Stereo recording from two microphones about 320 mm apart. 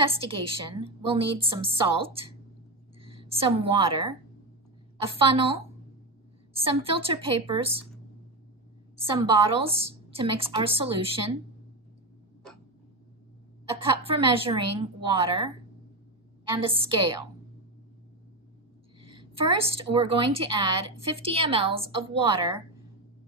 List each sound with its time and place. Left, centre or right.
0.0 s a woman's voice: centre
5.0 s a woman's voice: centre
9.3 s a woman's voice: centre
13.7 s a woman's voice: centre
16.5 s a woman's voice: centre
18.9 s a woman's voice: centre